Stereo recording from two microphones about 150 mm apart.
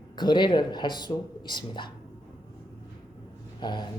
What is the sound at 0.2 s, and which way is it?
Speech, 30° left (ahead or behind).